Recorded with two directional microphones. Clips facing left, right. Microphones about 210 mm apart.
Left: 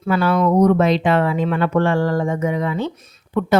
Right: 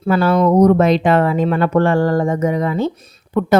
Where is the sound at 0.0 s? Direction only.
40° right (ahead or behind).